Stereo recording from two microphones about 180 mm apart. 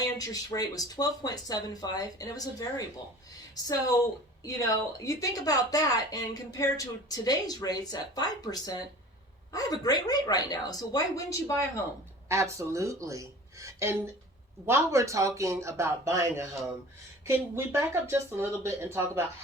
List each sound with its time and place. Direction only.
0.0 s speech: 20° left (ahead or behind)
4.4 s speech: 20° left (ahead or behind)
12.5 s speech: 15° right (ahead or behind)